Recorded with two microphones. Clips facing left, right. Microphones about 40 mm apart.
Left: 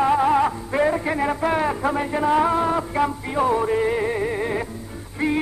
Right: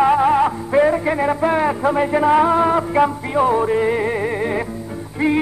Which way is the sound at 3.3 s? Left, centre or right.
Centre.